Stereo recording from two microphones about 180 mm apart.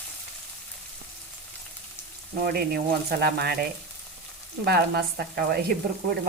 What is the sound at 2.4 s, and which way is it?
Sizzle, 60° right (ahead or behind).